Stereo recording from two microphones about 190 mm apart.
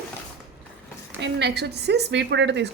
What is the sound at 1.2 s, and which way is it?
A woman's voice, 60° right (ahead or behind).